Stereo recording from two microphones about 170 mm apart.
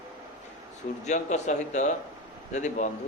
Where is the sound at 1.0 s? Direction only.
45° left (ahead or behind).